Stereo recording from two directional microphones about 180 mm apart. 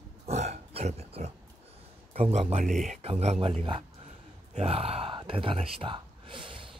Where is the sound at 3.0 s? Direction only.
35° right (ahead or behind).